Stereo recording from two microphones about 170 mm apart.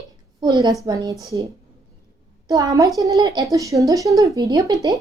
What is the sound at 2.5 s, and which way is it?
Speech, 20° right (ahead or behind).